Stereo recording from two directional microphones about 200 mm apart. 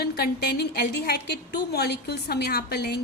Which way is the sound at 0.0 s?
55° left (ahead or behind).